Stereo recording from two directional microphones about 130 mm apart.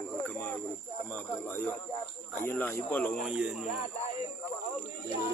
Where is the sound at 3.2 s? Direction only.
5° right (ahead or behind).